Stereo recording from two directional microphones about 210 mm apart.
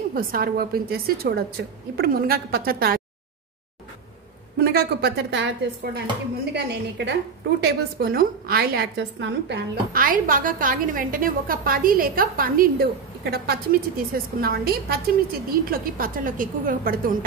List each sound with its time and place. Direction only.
0.1 s a woman's voice: 45° right (ahead or behind)
4.6 s a woman's voice: 50° right (ahead or behind)